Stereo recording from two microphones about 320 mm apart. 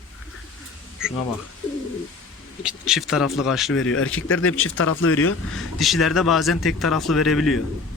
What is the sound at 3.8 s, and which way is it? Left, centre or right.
Speech, left.